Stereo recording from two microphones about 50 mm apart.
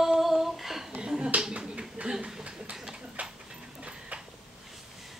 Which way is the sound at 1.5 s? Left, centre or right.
Centre.